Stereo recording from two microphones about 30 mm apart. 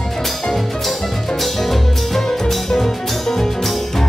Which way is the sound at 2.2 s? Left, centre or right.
Centre.